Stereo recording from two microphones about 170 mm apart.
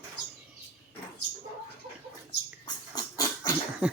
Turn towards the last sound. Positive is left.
turn(degrees=-5)  # may be behind; listen again after turning